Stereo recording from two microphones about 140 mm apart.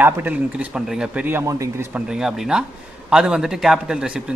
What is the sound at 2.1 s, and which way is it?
A man's voice, 5° right (ahead or behind).